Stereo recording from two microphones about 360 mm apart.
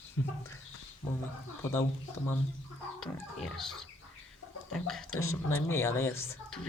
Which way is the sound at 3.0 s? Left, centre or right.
Centre.